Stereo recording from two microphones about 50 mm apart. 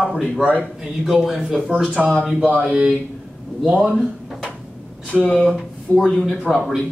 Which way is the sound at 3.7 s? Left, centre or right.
Centre.